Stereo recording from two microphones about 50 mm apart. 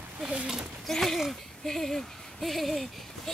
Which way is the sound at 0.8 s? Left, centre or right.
Centre.